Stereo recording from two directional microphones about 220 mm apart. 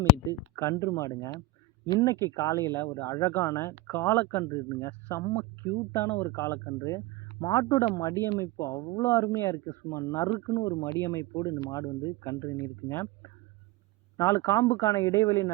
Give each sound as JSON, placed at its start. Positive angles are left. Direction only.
{"t": 0.3, "sound": "speech", "side_deg": 15}
{"t": 14.2, "sound": "speech", "side_deg": 15}